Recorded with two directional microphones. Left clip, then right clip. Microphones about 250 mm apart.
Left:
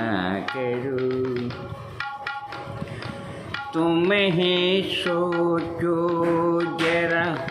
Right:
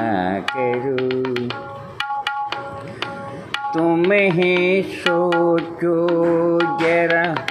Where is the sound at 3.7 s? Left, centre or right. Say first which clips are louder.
Right 4 dB; centre.